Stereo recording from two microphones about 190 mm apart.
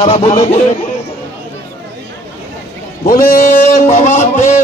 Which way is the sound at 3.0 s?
50° left (ahead or behind).